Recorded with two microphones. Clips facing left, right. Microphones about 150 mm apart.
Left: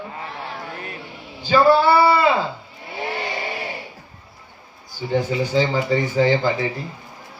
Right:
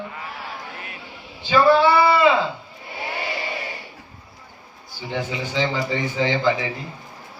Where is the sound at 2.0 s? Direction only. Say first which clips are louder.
Left 1 dB; 40° left (ahead or behind).